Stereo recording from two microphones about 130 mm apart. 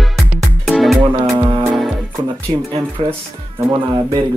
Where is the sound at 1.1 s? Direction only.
40° right (ahead or behind).